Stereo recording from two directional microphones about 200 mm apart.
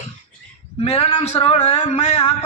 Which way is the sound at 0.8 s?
30° left (ahead or behind).